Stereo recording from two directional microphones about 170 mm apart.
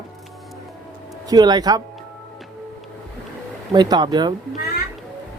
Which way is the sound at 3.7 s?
25° right (ahead or behind).